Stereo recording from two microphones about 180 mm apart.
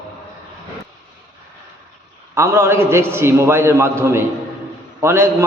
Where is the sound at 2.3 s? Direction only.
15° right (ahead or behind).